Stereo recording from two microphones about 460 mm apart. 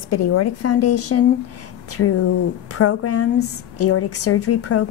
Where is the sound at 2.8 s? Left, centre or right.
Left.